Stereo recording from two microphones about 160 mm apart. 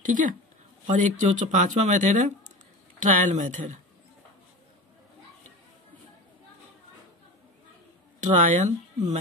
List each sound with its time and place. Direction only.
0.0 s a woman's voice: 55° right (ahead or behind)
8.2 s speech: 50° right (ahead or behind)